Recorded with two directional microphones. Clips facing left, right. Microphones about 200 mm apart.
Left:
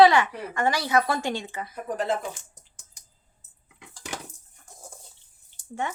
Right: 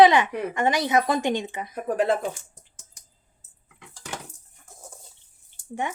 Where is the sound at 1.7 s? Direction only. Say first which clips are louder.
Right 5 dB; 60° right (ahead or behind).